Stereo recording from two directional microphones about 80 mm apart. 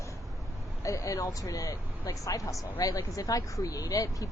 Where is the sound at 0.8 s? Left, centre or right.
Left.